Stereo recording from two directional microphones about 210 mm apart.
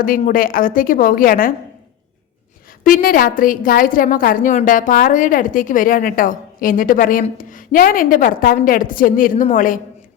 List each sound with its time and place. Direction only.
0.0 s a woman's voice: 40° left (ahead or behind)
2.8 s a woman's voice: 40° left (ahead or behind)